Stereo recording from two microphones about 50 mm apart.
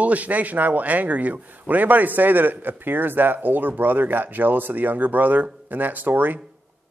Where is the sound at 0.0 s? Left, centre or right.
Right.